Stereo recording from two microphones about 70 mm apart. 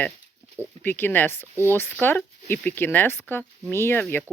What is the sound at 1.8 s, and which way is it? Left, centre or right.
Speech, left.